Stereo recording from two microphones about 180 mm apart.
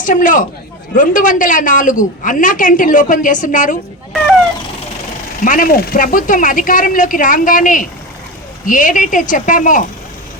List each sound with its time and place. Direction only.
0.0 s a woman's voice: 45° left (ahead or behind)
5.4 s a woman's voice: 50° left (ahead or behind)